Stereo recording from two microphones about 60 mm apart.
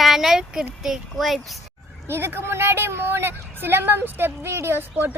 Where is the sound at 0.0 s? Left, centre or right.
Centre.